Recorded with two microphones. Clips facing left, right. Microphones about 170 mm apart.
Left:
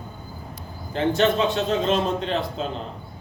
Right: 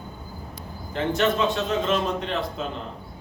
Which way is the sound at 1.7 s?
30° left (ahead or behind).